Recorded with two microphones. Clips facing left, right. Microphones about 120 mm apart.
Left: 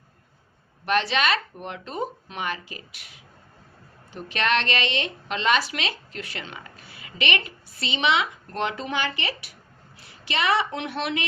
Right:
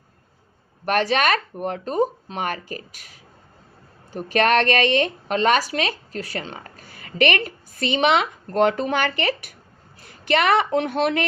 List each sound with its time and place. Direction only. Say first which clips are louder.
0.9 s speech: right 3 dB; 45° right (ahead or behind)